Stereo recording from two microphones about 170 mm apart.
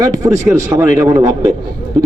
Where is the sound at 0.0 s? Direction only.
20° right (ahead or behind).